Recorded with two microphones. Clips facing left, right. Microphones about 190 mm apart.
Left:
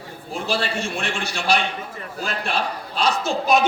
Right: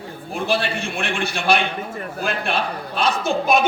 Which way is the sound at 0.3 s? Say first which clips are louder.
Right 2 dB; 55° right (ahead or behind).